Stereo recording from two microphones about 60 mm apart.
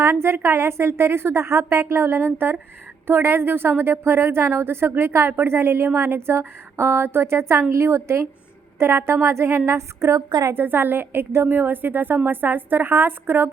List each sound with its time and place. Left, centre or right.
0.0 s a woman's voice: right
10.5 s a woman's voice: right